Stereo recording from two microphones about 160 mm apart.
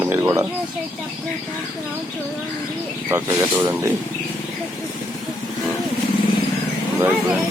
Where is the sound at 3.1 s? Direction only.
15° right (ahead or behind).